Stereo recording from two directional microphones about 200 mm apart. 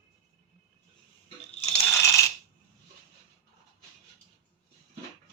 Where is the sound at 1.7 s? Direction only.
10° left (ahead or behind).